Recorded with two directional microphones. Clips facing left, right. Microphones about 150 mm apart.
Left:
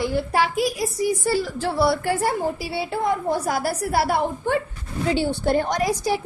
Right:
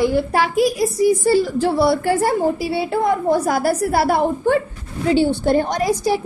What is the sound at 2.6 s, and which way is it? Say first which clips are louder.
A woman's voice: right 6 dB; 55° right (ahead or behind).